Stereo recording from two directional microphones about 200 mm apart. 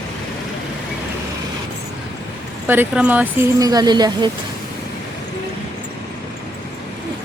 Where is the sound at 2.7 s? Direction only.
10° right (ahead or behind).